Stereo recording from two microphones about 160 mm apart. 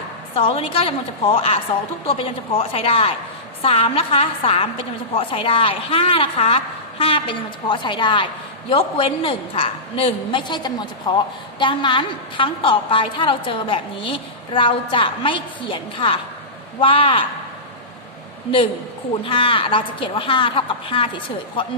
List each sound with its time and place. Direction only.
0.3 s a woman's voice: 35° left (ahead or behind)
19.2 s a woman's voice: 35° left (ahead or behind)